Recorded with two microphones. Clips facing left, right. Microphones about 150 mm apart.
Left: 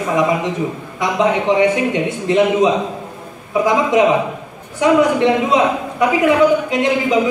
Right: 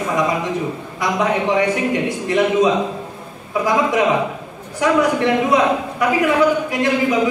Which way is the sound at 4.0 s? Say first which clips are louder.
Left 3 dB; 20° left (ahead or behind).